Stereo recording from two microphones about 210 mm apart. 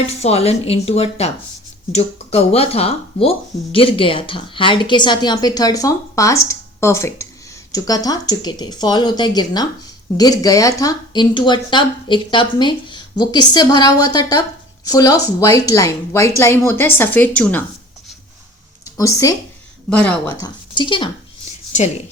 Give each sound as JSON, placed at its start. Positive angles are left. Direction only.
{"t": 0.1, "sound": "a woman's voice", "side_deg": 30}
{"t": 18.9, "sound": "a woman's voice", "side_deg": 15}
{"t": 20.7, "sound": "speech", "side_deg": 20}